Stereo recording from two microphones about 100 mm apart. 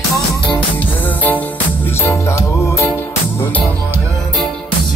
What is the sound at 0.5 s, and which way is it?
Music, 15° left (ahead or behind).